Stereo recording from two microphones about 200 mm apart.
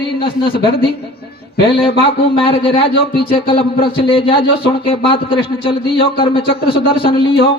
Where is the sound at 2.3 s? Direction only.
25° left (ahead or behind).